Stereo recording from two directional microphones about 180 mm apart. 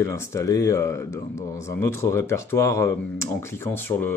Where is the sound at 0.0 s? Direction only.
15° left (ahead or behind).